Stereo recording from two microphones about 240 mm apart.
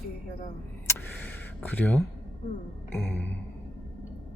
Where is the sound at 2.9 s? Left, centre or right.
Centre.